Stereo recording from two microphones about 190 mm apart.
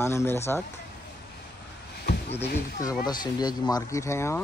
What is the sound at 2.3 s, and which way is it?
Speech, 15° left (ahead or behind).